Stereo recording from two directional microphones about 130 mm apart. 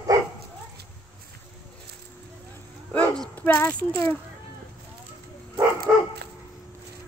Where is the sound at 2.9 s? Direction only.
10° left (ahead or behind).